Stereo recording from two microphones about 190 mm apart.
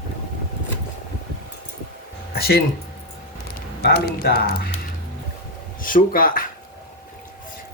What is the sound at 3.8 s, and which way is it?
Speech, 55° left (ahead or behind).